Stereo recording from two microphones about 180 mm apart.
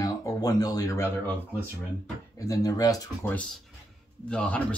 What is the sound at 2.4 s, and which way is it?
Speech, 20° left (ahead or behind).